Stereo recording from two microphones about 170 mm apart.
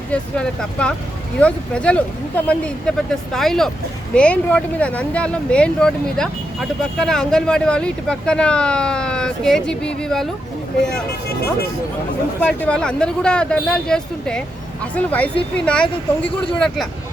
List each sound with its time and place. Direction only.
0.1 s speech: 5° left (ahead or behind)
12.4 s speech: 5° left (ahead or behind)